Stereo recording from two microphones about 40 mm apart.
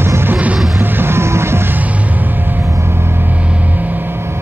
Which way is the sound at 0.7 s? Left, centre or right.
Right.